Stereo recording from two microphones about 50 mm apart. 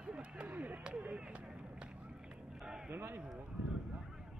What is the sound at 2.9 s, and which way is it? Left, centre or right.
Run, right.